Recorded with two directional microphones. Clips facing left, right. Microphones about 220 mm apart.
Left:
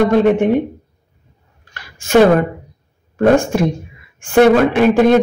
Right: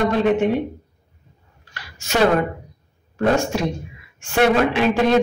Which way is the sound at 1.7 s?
50° left (ahead or behind).